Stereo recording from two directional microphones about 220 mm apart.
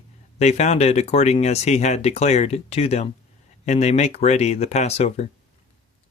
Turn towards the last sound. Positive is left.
turn(degrees=30)  # may be behind; listen again after turning